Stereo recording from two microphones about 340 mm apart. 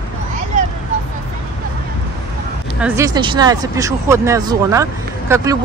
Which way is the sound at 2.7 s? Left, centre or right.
Centre.